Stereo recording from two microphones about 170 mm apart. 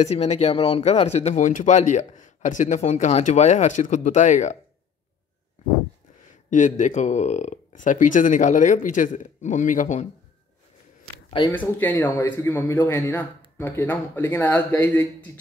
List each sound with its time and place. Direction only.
0.0 s speech: 40° left (ahead or behind)
6.5 s speech: 45° left (ahead or behind)
11.2 s speech: 30° left (ahead or behind)
11.5 s speech: 10° left (ahead or behind)